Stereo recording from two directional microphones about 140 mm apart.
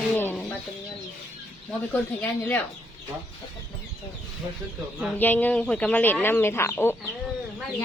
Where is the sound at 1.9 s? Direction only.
10° left (ahead or behind).